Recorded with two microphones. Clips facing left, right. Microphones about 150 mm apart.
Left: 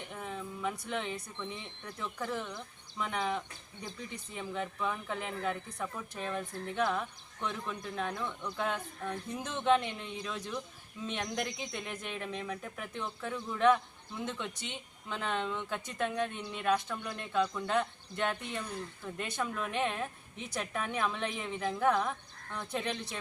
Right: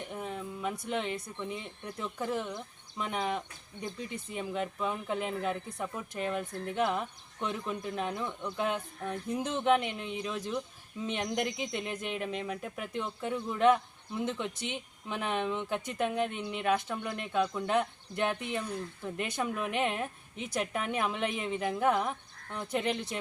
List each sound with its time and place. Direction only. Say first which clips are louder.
0.1 s speech: right 3 dB; 15° right (ahead or behind)